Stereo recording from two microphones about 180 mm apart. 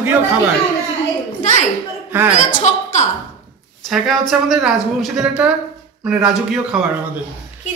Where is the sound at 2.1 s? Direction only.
10° right (ahead or behind).